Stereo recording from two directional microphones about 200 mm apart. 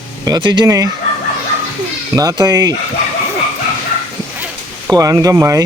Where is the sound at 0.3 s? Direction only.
20° right (ahead or behind).